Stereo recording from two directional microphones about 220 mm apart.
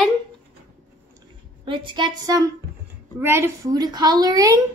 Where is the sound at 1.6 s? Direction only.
20° right (ahead or behind).